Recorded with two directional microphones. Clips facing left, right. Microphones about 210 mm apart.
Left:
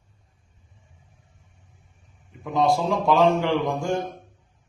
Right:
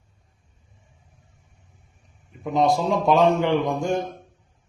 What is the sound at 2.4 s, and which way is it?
A man's voice, 20° right (ahead or behind).